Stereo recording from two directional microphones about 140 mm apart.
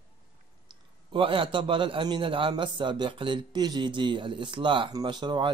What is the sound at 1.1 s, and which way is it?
A man's voice, 40° right (ahead or behind).